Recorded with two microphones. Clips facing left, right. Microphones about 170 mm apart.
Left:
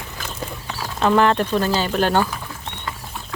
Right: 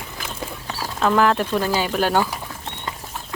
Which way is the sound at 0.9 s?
Centre (ahead or behind).